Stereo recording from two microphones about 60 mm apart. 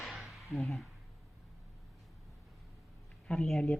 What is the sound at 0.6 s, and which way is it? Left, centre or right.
Speech, centre.